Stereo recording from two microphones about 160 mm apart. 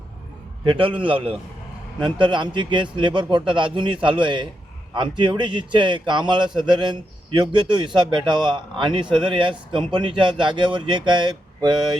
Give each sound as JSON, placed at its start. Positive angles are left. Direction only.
{"t": 0.6, "sound": "a man's voice", "side_deg": -30}